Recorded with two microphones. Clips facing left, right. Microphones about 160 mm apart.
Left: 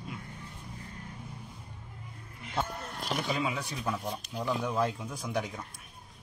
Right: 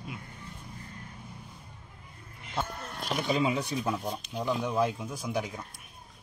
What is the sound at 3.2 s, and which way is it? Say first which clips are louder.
Speech: right 8 dB; 25° right (ahead or behind).